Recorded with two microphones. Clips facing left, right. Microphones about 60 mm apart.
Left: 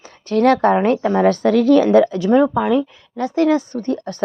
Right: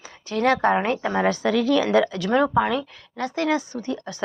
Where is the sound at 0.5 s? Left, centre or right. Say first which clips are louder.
Left 3 dB; right.